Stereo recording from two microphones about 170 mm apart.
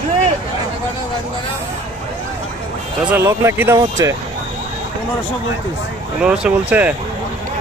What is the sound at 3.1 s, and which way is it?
Speech, 15° right (ahead or behind).